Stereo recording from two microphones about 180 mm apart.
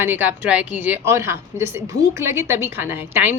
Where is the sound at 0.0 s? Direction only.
10° right (ahead or behind).